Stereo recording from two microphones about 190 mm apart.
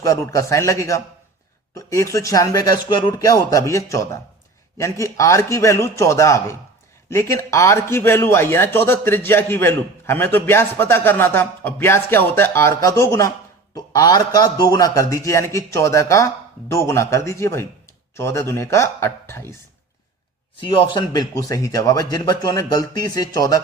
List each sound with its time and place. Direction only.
0.0 s a man's voice: 15° left (ahead or behind)
20.6 s speech: 25° left (ahead or behind)